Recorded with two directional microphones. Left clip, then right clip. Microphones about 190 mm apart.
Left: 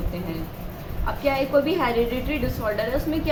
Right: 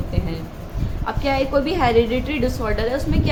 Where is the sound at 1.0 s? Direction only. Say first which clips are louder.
Right 2 dB; 60° right (ahead or behind).